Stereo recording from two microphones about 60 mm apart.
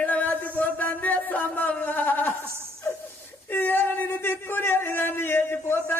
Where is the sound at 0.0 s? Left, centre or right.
Left.